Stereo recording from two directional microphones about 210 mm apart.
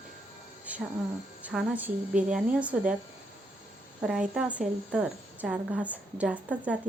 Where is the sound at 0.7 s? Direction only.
5° right (ahead or behind).